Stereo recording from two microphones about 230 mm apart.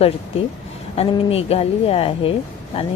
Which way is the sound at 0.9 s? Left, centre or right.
Left.